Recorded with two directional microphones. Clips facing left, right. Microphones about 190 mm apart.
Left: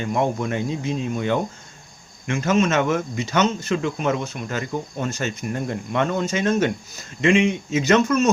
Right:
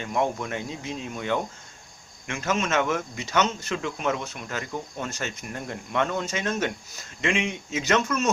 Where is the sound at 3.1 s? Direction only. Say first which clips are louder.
Left 4 dB; 5° right (ahead or behind).